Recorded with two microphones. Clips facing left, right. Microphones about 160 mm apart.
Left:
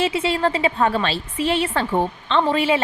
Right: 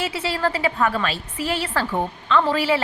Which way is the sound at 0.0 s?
25° left (ahead or behind).